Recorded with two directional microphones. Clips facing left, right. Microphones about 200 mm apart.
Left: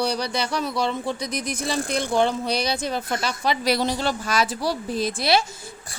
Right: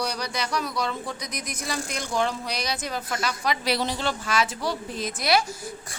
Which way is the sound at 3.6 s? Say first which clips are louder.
Left 4 dB; 40° left (ahead or behind).